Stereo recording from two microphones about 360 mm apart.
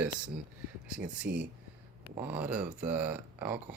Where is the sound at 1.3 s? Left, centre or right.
Right.